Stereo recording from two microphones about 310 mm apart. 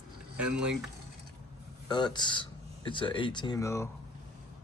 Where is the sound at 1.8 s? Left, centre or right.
Centre.